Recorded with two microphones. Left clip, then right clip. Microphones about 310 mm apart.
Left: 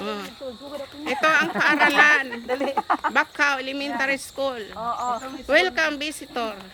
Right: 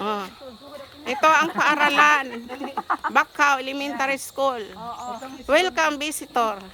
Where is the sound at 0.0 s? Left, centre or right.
Centre.